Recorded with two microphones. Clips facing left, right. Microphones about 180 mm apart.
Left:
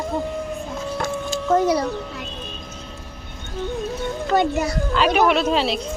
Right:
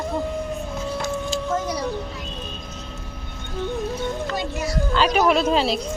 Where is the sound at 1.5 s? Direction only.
65° left (ahead or behind).